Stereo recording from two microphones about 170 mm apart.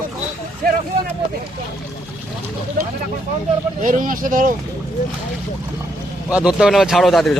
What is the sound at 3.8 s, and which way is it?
Speech, 50° right (ahead or behind).